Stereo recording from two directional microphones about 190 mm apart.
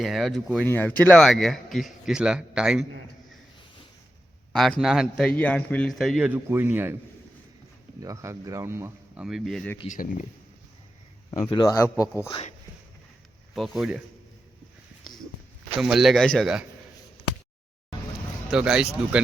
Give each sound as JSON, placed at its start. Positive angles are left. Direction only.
{"t": 0.0, "sound": "a man's voice", "side_deg": 0}
{"t": 4.5, "sound": "a man's voice", "side_deg": 0}
{"t": 8.0, "sound": "speech", "side_deg": -15}
{"t": 9.2, "sound": "a man's voice", "side_deg": 0}
{"t": 9.9, "sound": "speech", "side_deg": 45}
{"t": 11.3, "sound": "a man's voice", "side_deg": 25}
{"t": 13.5, "sound": "a man's voice", "side_deg": 0}
{"t": 15.8, "sound": "a man's voice", "side_deg": 0}
{"t": 18.5, "sound": "a man's voice", "side_deg": -5}